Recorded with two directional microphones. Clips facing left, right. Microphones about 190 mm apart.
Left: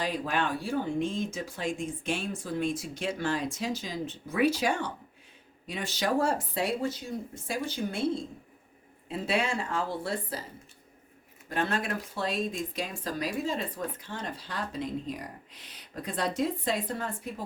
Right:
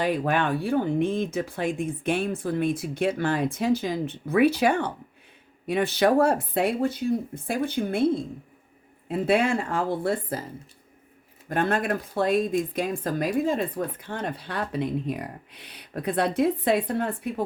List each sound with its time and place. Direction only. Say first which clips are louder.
0.0 s speech: right 6 dB; 60° right (ahead or behind)
11.4 s speech: right 6 dB; 55° right (ahead or behind)